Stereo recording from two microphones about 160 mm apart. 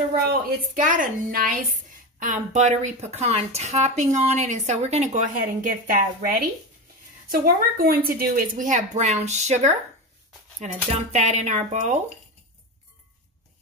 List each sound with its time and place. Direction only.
0.7 s a woman's voice: 55° right (ahead or behind)